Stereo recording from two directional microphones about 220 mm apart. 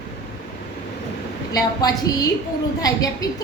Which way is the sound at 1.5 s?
15° left (ahead or behind).